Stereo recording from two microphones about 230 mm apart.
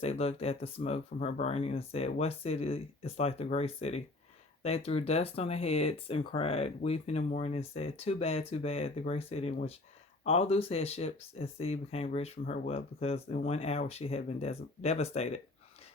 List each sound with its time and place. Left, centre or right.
0.0 s speech: left